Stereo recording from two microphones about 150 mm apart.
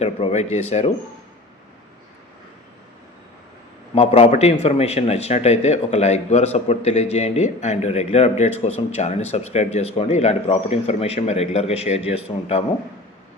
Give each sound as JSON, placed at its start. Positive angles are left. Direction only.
{"t": 0.0, "sound": "a man's voice", "side_deg": 45}
{"t": 3.9, "sound": "a man's voice", "side_deg": 45}